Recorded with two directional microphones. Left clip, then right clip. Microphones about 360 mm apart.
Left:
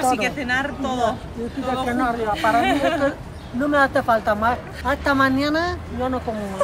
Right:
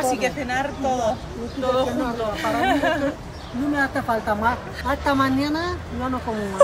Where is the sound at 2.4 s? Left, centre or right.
Centre.